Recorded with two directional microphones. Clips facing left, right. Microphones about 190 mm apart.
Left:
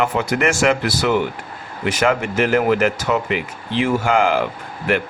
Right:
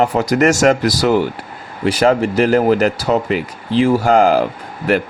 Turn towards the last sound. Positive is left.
turn(degrees=-40)  # may be behind; listen again after turning